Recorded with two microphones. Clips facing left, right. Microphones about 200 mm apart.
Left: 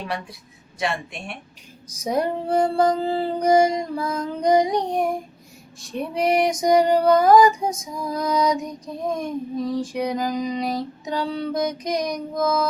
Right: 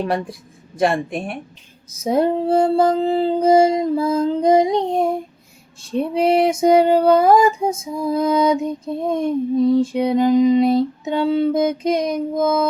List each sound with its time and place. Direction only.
0.0 s speech: 50° right (ahead or behind)
2.0 s female singing: 25° right (ahead or behind)